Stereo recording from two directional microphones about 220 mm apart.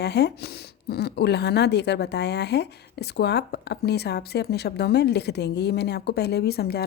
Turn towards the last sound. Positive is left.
turn(degrees=45)  # may be behind; listen again after turning